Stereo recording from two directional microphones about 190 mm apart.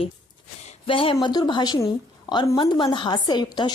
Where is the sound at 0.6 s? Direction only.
30° left (ahead or behind).